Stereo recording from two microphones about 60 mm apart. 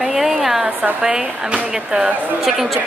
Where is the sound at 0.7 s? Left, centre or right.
Right.